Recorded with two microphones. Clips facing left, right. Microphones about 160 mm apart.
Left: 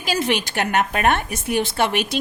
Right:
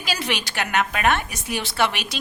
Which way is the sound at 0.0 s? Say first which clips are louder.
Left 5 dB; 45° left (ahead or behind).